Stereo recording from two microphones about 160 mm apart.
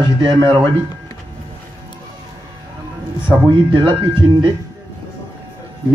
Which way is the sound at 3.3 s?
30° right (ahead or behind).